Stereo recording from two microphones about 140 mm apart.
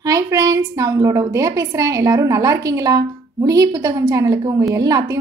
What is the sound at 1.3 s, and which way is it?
A woman's voice, 25° right (ahead or behind).